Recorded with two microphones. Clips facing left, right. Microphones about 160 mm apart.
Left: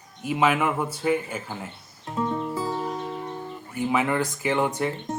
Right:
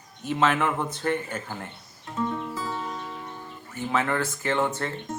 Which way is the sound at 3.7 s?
10° left (ahead or behind).